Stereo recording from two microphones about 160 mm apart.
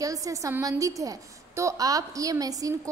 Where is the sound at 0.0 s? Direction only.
20° right (ahead or behind).